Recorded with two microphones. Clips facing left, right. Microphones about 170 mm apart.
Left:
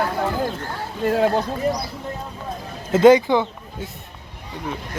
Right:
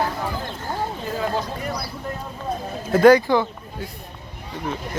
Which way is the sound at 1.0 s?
70° left (ahead or behind).